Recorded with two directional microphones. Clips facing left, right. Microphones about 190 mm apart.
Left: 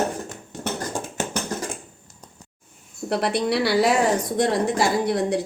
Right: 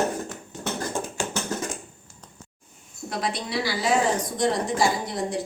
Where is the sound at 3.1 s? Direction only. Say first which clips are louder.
Left 7 dB; 65° left (ahead or behind).